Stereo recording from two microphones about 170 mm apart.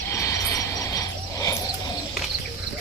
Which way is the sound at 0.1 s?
20° left (ahead or behind).